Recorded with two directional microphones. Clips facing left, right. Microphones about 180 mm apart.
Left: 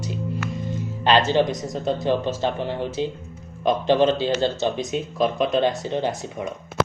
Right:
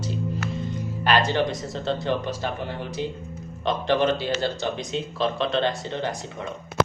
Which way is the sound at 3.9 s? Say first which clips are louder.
Left 3 dB; 20° left (ahead or behind).